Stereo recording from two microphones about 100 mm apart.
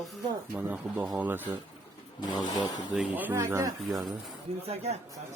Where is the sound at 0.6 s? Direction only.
15° right (ahead or behind).